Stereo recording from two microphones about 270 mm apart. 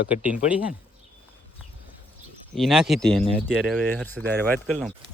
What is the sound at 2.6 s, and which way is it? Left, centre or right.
Speech, centre.